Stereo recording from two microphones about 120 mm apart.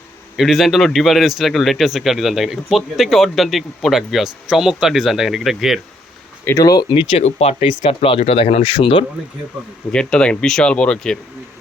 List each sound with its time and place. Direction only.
0.3 s speech: centre (ahead or behind)
6.4 s speech: 25° left (ahead or behind)
6.9 s speech: 55° left (ahead or behind)
9.9 s speech: 5° left (ahead or behind)